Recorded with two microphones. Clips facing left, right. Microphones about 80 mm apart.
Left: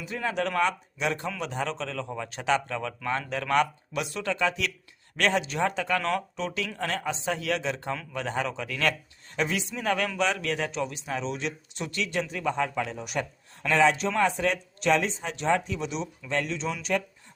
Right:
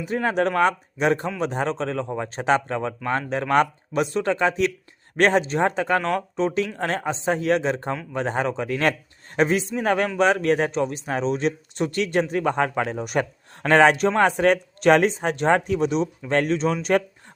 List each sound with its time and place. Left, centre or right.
0.0 s a man's voice: right